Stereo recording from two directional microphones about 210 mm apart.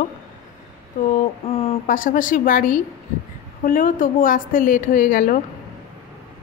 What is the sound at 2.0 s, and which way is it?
A woman's voice, 40° left (ahead or behind).